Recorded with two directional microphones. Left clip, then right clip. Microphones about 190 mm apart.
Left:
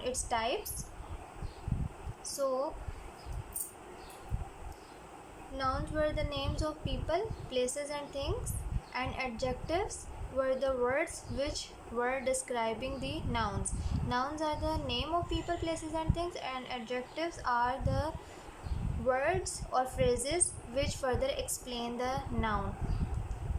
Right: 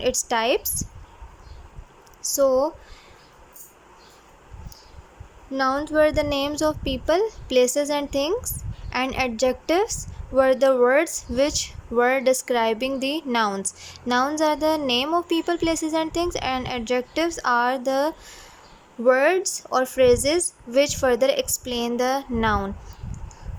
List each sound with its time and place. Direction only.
0.0 s a woman's voice: 60° right (ahead or behind)
2.3 s a woman's voice: 60° right (ahead or behind)
5.5 s a woman's voice: 55° right (ahead or behind)